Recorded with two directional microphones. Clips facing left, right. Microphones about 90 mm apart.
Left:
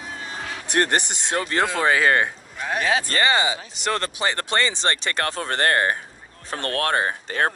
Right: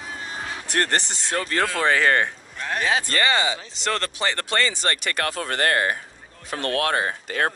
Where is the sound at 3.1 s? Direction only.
25° left (ahead or behind).